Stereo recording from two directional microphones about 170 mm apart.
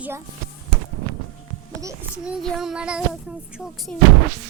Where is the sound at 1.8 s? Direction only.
15° right (ahead or behind).